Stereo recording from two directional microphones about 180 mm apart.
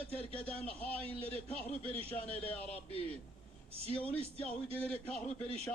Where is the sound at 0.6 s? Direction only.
10° left (ahead or behind).